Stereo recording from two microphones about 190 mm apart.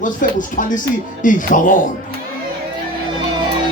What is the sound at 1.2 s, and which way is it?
Speech, 45° left (ahead or behind).